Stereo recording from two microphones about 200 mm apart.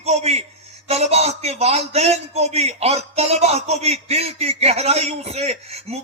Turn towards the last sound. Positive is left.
turn(degrees=-30)  # may be behind; listen again after turning